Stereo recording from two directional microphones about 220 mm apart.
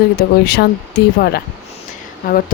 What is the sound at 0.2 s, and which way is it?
Speech, 45° left (ahead or behind).